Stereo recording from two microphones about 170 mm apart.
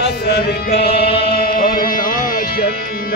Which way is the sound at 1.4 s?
60° left (ahead or behind).